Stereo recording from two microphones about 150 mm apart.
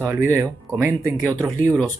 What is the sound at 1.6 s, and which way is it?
Speech, 10° left (ahead or behind).